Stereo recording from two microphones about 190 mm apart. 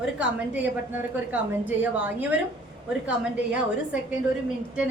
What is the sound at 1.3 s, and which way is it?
A woman's voice, 10° right (ahead or behind).